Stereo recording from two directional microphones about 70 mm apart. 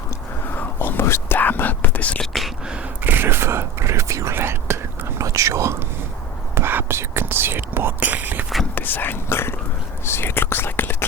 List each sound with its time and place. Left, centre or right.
0.5 s whispering: left
1.4 s whispering: left
2.2 s whispering: centre
3.0 s a sound: right
4.4 s whispering: right
8.7 s speech: left